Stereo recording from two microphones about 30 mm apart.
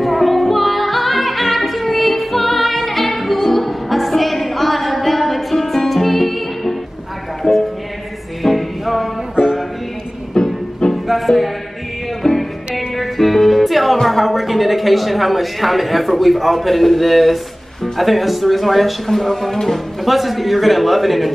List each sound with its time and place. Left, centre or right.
0.0 s music: centre
7.4 s music: centre
8.4 s music: centre
10.4 s music: left
11.1 s music: centre
14.0 s a man's voice: centre
20.1 s speech: centre